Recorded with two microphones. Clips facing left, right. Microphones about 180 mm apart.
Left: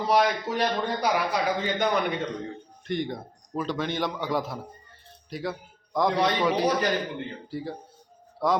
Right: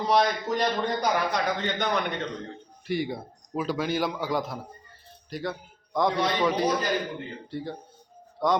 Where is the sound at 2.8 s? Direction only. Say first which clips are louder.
Right 1 dB; 5° right (ahead or behind).